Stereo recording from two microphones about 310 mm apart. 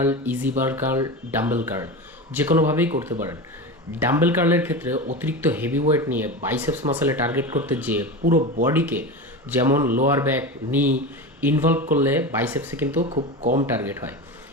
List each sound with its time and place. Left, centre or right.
0.0 s speech: centre
13.0 s speech: centre
13.7 s speech: centre